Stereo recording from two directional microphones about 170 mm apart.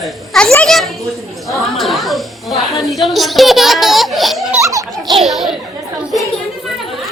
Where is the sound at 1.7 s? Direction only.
Centre (ahead or behind).